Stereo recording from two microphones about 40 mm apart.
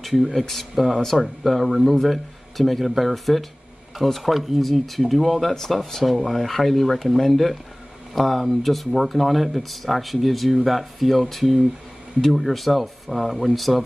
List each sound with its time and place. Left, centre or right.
0.0 s speech: centre